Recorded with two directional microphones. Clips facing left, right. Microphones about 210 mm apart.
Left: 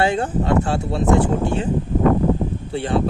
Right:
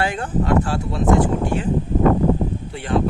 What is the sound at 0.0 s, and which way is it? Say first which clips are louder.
Speech: left 3 dB; 25° left (ahead or behind).